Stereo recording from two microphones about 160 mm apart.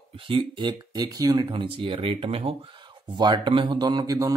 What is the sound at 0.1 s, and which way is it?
Speech, 35° right (ahead or behind).